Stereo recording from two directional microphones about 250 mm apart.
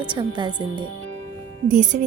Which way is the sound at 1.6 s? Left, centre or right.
Right.